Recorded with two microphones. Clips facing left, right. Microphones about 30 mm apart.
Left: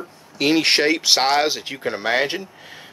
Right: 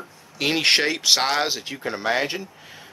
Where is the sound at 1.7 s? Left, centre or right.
Left.